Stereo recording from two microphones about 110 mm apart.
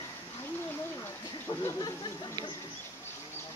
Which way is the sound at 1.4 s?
30° left (ahead or behind).